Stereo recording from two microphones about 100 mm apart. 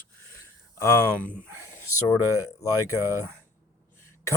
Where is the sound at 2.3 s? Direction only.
35° left (ahead or behind).